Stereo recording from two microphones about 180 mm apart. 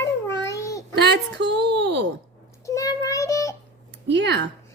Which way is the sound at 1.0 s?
75° right (ahead or behind).